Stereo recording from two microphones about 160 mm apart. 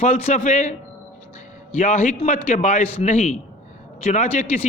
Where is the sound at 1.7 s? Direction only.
50° left (ahead or behind).